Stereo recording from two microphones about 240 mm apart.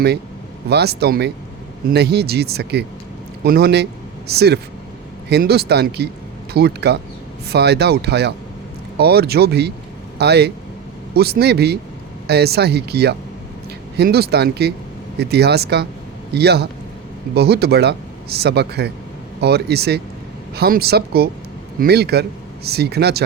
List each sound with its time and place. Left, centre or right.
0.7 s speech: right